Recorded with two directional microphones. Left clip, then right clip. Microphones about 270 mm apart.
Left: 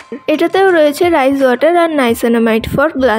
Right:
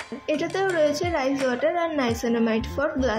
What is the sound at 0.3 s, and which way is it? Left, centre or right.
A woman's voice, left.